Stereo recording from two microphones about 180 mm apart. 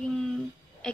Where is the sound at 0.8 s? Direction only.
5° left (ahead or behind).